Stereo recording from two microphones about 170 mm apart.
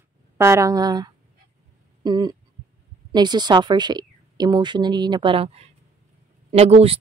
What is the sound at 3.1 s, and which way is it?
Speech, 25° right (ahead or behind).